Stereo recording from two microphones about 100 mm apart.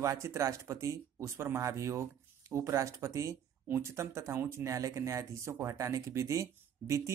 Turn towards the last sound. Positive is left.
turn(degrees=-30)  # may be behind; listen again after turning